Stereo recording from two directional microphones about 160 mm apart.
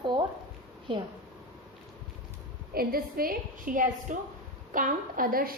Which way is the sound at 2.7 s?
70° right (ahead or behind).